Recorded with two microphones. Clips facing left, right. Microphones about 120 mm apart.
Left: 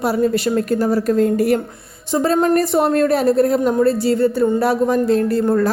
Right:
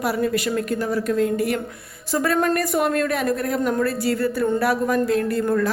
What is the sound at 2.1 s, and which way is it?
A woman's voice, 25° left (ahead or behind).